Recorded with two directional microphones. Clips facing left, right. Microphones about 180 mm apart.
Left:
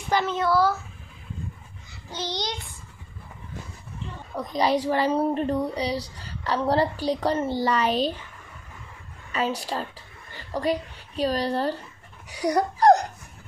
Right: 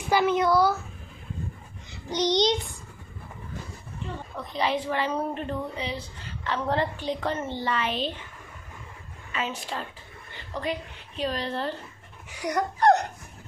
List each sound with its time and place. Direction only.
0.1 s a child's voice: 10° right (ahead or behind)
2.0 s babbling: 20° right (ahead or behind)
4.4 s a woman's voice: 40° left (ahead or behind)
9.3 s a woman's voice: 40° left (ahead or behind)
12.3 s a sound: 35° left (ahead or behind)